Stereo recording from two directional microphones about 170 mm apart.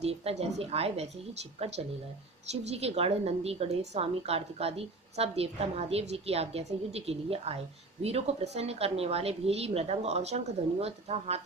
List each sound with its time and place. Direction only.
0.0 s a woman's voice: 35° right (ahead or behind)
2.5 s a woman's voice: 40° right (ahead or behind)